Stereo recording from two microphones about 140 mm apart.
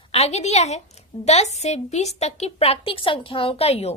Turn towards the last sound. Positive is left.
turn(degrees=50)  # may be behind; listen again after turning